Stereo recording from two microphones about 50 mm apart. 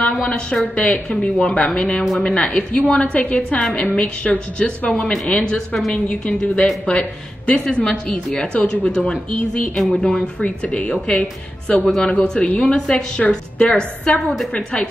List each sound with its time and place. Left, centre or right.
0.0 s speech: left
10.1 s speech: left
12.1 s speech: left
12.7 s speech: centre